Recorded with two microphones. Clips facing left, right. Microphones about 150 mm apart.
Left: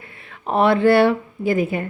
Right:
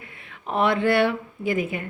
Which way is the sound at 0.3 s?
35° left (ahead or behind).